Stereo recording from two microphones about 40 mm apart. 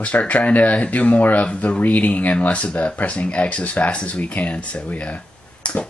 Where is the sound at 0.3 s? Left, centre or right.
Left.